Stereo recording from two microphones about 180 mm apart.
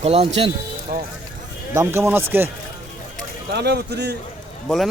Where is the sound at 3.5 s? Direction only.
70° right (ahead or behind).